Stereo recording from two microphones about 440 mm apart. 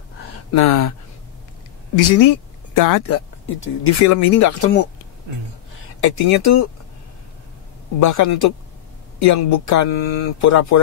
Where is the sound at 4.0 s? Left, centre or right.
Left.